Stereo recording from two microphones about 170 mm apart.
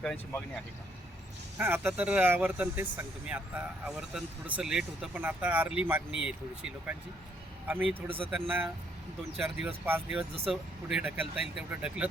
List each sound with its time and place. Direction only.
0.0 s speech: 5° left (ahead or behind)
1.5 s speech: 10° right (ahead or behind)
8.0 s speech: 30° right (ahead or behind)
8.3 s speech: 10° right (ahead or behind)